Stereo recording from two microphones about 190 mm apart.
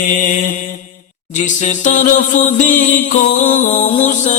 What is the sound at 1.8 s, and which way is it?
Mantra, 40° left (ahead or behind).